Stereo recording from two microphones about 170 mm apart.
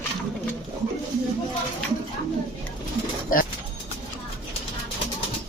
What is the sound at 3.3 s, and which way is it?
Bird, 55° left (ahead or behind).